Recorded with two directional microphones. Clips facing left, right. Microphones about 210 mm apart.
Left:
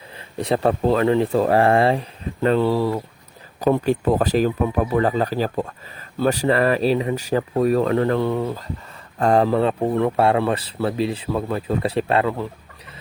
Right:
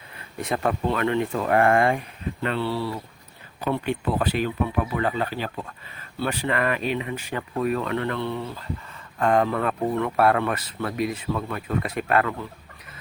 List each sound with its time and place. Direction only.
0.2 s speech: 30° left (ahead or behind)